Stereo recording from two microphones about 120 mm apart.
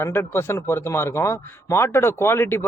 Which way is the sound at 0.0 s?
20° left (ahead or behind).